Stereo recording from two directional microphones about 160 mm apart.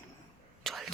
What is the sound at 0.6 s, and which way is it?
Whispering, centre (ahead or behind).